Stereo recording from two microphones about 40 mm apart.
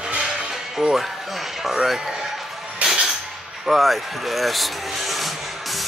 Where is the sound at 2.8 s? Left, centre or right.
Right.